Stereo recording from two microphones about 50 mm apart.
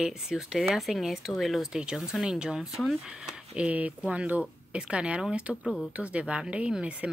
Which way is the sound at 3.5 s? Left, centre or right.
Right.